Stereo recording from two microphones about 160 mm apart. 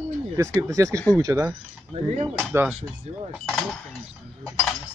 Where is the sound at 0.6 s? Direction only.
20° right (ahead or behind).